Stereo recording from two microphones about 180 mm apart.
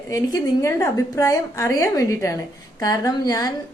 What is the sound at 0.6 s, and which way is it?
A woman's voice, 20° left (ahead or behind).